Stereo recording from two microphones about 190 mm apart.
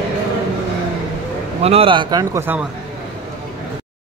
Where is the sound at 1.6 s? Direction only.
30° right (ahead or behind); by 2.7 s 10° right (ahead or behind).